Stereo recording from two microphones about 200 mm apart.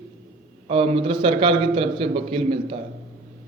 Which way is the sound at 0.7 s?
30° right (ahead or behind).